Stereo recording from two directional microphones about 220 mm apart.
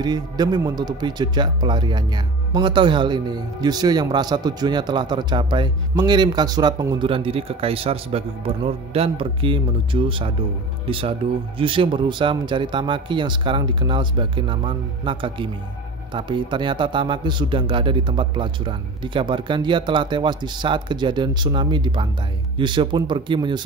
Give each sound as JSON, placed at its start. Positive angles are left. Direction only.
{"t": 0.0, "sound": "speech", "side_deg": -20}